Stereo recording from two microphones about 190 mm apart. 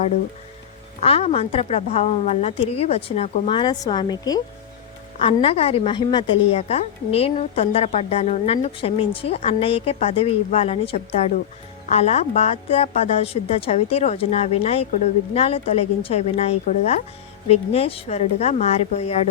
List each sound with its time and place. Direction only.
1.0 s a woman's voice: 30° left (ahead or behind)